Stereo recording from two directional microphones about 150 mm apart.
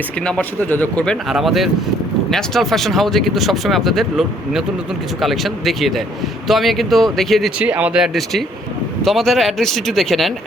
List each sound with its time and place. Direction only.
0.3 s speech: 10° left (ahead or behind)
7.6 s speech: 10° right (ahead or behind)